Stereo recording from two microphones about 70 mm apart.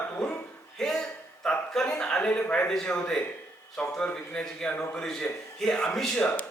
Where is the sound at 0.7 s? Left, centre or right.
Centre.